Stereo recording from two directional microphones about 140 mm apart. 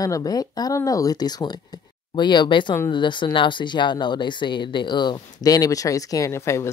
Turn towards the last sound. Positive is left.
turn(degrees=20)  # may be behind; listen again after turning